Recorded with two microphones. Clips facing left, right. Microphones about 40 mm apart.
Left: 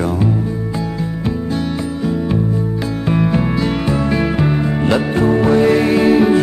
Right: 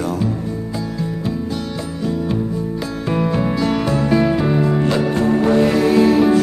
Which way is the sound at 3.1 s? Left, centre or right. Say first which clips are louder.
Left 2 dB; left.